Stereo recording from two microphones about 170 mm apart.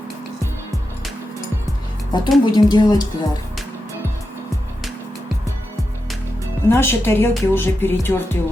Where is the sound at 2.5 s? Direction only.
25° left (ahead or behind).